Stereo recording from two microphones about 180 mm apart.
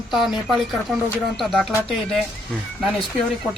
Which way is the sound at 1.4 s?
Centre (ahead or behind).